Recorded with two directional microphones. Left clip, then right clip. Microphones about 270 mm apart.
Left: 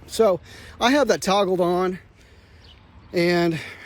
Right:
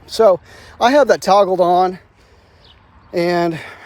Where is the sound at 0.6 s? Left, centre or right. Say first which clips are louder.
Right 7 dB; centre.